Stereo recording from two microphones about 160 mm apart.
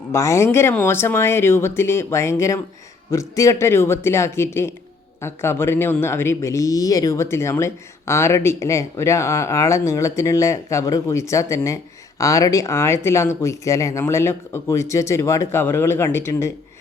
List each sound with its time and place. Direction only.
0.1 s speech: 20° left (ahead or behind)